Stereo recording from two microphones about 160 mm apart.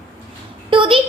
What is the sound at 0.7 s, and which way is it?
Speech, 30° right (ahead or behind).